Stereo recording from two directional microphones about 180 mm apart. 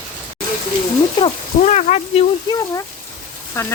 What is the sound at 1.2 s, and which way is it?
Speech, 40° left (ahead or behind).